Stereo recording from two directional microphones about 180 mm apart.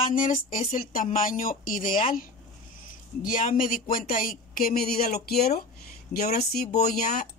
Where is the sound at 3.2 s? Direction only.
50° left (ahead or behind).